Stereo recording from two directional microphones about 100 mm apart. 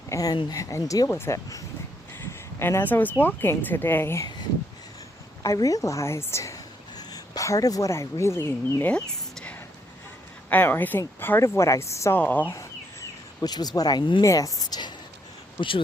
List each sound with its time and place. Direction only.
0.1 s speech: 40° left (ahead or behind)
5.4 s a woman's voice: 35° left (ahead or behind); by 9.0 s 20° left (ahead or behind)
9.3 s whispering: 10° left (ahead or behind)
10.5 s speech: 20° left (ahead or behind)
12.2 s speech: 20° left (ahead or behind)
12.5 s a sound: 35° left (ahead or behind)
14.3 s speech: 35° left (ahead or behind)
14.6 s a sound: 45° left (ahead or behind)
15.5 s speech: 60° left (ahead or behind)